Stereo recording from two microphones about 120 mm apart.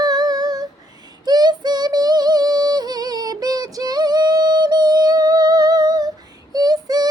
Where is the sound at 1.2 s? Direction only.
35° right (ahead or behind).